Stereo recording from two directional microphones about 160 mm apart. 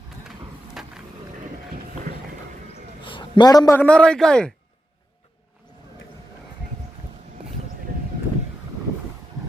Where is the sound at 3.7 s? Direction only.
5° left (ahead or behind).